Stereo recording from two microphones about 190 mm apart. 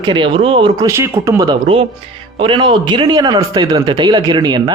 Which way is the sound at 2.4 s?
25° right (ahead or behind).